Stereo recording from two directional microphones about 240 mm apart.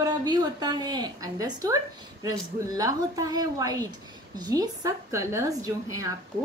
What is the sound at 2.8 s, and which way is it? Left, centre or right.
A woman's voice, centre.